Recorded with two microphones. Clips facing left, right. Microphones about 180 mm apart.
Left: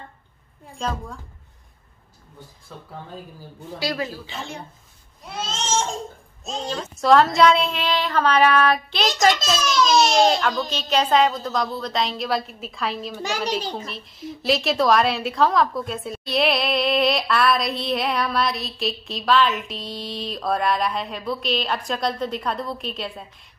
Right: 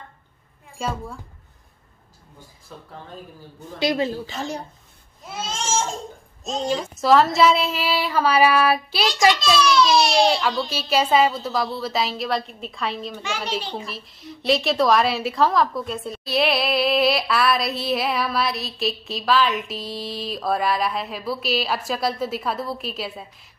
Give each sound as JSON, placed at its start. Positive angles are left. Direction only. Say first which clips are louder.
{"t": 0.7, "sound": "speech", "louder": "even", "side_deg": -10}
{"t": 3.8, "sound": "speech", "louder": "right 5 dB", "side_deg": -20}
{"t": 4.3, "sound": "a woman's voice", "louder": "right 5 dB", "side_deg": -40}
{"t": 5.2, "sound": "speech", "louder": "even", "side_deg": -5}
{"t": 6.7, "sound": "speech", "louder": "left 1 dB", "side_deg": -5}
{"t": 9.3, "sound": "a child's voice", "louder": "right 3 dB", "side_deg": 45}
{"t": 10.7, "sound": "a woman's voice", "louder": "right 1 dB", "side_deg": -10}
{"t": 13.6, "sound": "a child's voice", "louder": "left 1 dB", "side_deg": 45}
{"t": 13.8, "sound": "a woman's voice", "louder": "left 2 dB", "side_deg": 0}